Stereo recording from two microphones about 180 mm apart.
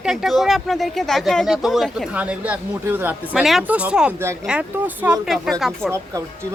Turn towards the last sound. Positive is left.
turn(degrees=-5)  # may be behind; listen again after turning